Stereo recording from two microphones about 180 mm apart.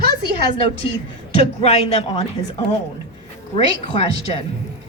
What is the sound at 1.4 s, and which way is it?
Speech, 35° left (ahead or behind).